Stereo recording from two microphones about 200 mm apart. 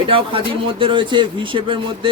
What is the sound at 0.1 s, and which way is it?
A man's voice, 25° right (ahead or behind).